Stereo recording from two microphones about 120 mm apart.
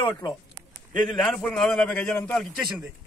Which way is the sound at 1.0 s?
5° left (ahead or behind).